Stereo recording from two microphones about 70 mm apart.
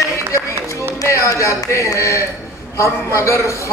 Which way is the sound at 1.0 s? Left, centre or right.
Left.